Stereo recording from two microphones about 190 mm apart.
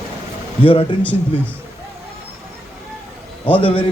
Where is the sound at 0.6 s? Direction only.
25° left (ahead or behind).